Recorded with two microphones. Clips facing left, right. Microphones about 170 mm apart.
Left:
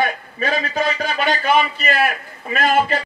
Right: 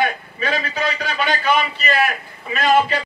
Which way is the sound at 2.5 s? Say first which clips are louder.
Right 1 dB; 50° left (ahead or behind).